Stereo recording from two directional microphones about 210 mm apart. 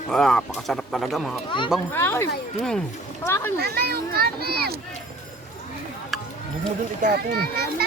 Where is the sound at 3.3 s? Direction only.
15° left (ahead or behind).